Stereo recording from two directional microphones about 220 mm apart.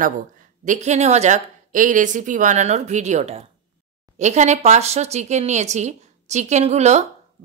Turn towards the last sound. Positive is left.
turn(degrees=-30)  # may be behind; listen again after turning